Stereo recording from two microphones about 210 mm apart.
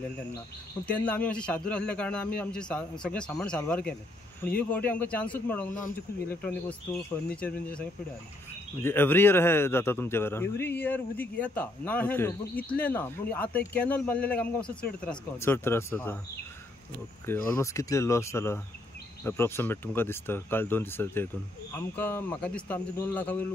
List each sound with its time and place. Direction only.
0.8 s a man's voice: 5° left (ahead or behind)
17.5 s a man's voice: 15° left (ahead or behind)